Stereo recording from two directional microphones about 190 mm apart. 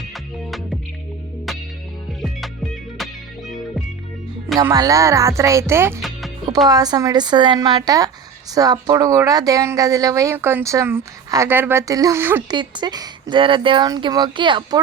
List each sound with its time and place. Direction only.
0.1 s music: centre (ahead or behind)
3.0 s music: centre (ahead or behind)
4.5 s speech: 20° right (ahead or behind)
6.0 s music: centre (ahead or behind)
6.7 s speech: 20° right (ahead or behind)
12.5 s speech: 25° right (ahead or behind)